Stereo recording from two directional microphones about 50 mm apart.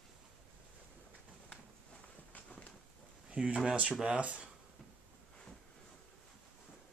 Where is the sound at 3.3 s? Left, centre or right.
Centre.